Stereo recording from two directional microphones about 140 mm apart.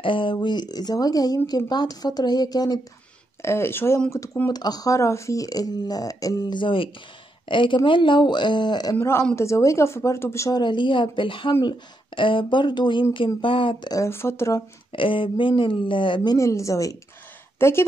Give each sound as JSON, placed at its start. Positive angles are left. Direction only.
{"t": 0.0, "sound": "speech", "side_deg": 35}
{"t": 3.4, "sound": "speech", "side_deg": 20}
{"t": 8.9, "sound": "speech", "side_deg": 20}
{"t": 10.6, "sound": "speech", "side_deg": 35}
{"t": 14.9, "sound": "speech", "side_deg": 40}
{"t": 16.3, "sound": "a woman's voice", "side_deg": 20}